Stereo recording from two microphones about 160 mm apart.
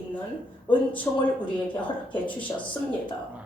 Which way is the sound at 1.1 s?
20° left (ahead or behind).